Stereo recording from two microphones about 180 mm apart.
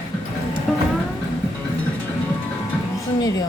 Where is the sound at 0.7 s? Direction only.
Centre (ahead or behind).